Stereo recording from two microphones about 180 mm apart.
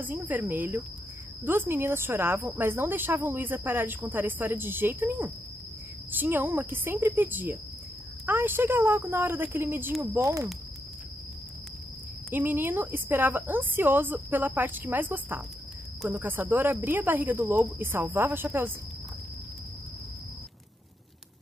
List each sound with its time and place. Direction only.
0.0 s a woman's voice: 10° right (ahead or behind)
12.3 s a woman's voice: 10° right (ahead or behind)